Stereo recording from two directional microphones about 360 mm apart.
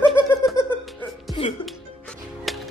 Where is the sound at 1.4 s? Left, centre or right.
Centre.